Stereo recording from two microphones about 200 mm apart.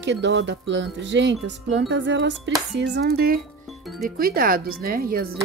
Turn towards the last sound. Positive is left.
turn(degrees=-45)  # may be behind; listen again after turning